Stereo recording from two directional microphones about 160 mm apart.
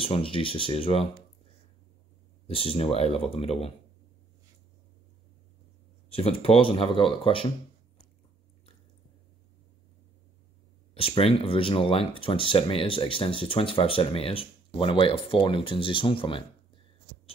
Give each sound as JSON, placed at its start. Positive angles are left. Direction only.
{"t": 0.0, "sound": "speech", "side_deg": 35}
{"t": 2.4, "sound": "speech", "side_deg": 35}
{"t": 6.0, "sound": "speech", "side_deg": 40}
{"t": 11.0, "sound": "speech", "side_deg": 35}